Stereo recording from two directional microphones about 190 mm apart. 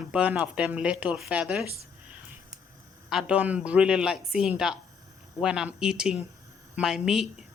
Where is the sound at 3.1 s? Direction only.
5° right (ahead or behind).